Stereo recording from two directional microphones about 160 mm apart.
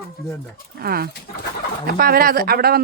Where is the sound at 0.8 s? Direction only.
70° right (ahead or behind).